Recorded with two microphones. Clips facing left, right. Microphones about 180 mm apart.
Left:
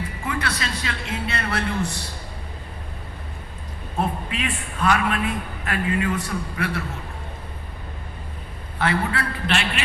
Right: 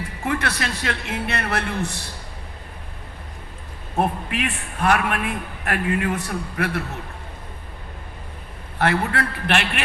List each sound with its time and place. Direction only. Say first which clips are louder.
0.3 s a man's voice: right 3 dB; 65° right (ahead or behind)
3.9 s a man's voice: right 3 dB; 65° right (ahead or behind)
8.8 s a man's voice: right 2 dB; 60° right (ahead or behind)